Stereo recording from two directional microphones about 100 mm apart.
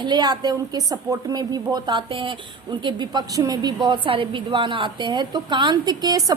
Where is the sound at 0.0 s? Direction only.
45° right (ahead or behind).